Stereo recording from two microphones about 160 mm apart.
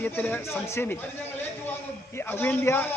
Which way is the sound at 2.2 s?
15° left (ahead or behind).